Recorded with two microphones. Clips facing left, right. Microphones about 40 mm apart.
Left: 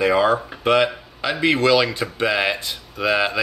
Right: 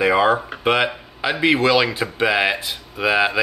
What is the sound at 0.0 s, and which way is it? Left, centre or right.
Speech, centre.